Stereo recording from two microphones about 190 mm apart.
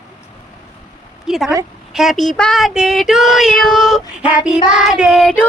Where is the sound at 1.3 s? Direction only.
Centre (ahead or behind).